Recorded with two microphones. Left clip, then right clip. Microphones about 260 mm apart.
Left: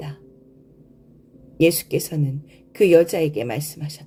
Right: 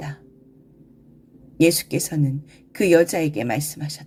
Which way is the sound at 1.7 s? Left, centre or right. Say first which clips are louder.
Left 2 dB; right.